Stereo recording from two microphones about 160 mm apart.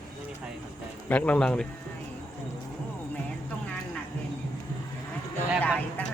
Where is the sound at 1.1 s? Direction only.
10° left (ahead or behind).